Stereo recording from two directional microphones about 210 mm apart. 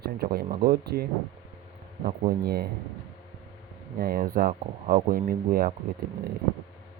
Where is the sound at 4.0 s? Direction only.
45° right (ahead or behind).